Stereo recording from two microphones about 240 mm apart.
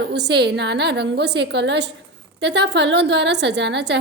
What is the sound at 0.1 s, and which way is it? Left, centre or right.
A woman's voice, right.